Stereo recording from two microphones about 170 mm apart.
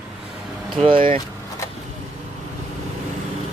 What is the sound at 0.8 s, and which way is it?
Speech, 30° right (ahead or behind).